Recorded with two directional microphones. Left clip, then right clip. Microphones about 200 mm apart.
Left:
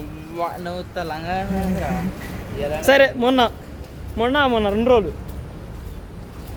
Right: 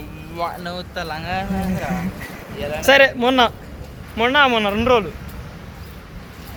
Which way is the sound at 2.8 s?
20° left (ahead or behind).